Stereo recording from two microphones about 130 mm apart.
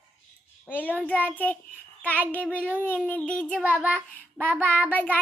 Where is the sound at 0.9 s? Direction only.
10° left (ahead or behind).